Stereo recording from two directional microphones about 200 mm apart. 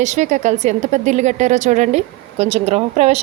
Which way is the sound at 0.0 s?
35° right (ahead or behind).